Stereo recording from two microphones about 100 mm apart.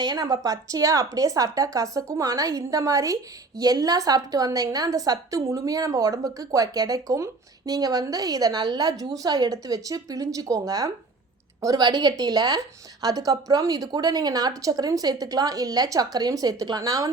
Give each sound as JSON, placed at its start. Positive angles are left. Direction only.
{"t": 0.0, "sound": "a woman's voice", "side_deg": -45}